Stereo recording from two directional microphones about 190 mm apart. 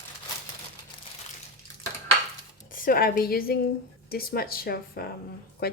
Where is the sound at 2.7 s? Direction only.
50° left (ahead or behind).